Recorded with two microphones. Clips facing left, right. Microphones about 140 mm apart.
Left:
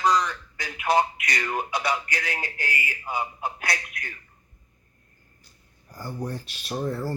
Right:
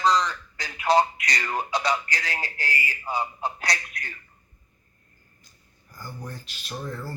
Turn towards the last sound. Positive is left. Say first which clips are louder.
# left 6 dB
turn(degrees=35)  # may be behind; listen again after turning